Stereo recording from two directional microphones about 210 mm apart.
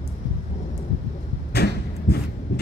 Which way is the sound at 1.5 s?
50° left (ahead or behind).